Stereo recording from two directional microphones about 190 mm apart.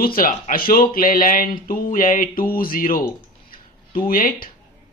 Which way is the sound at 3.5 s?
50° left (ahead or behind).